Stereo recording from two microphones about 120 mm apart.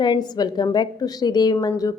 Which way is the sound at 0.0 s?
35° left (ahead or behind).